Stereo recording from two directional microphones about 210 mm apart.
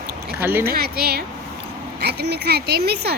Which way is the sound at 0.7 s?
50° right (ahead or behind).